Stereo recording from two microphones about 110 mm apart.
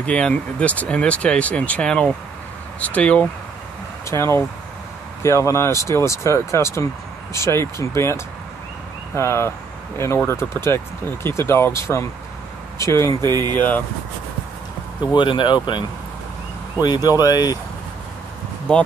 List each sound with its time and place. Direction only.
0.0 s speech: 10° left (ahead or behind)
4.0 s speech: 25° left (ahead or behind)
13.6 s speech: 15° left (ahead or behind)
15.1 s speech: 45° left (ahead or behind)
16.8 s speech: 40° left (ahead or behind)